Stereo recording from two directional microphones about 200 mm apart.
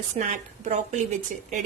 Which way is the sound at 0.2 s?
35° right (ahead or behind).